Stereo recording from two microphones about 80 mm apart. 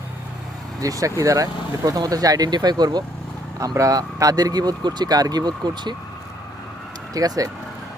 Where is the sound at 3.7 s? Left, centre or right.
Right.